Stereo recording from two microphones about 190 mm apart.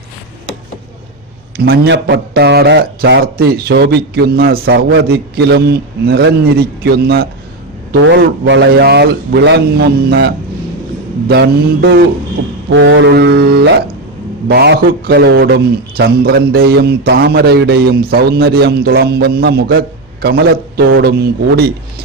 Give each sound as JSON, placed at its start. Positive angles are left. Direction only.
{"t": 1.5, "sound": "a man's voice", "side_deg": -55}
{"t": 8.2, "sound": "a man's voice", "side_deg": -65}
{"t": 12.7, "sound": "a man's voice", "side_deg": -75}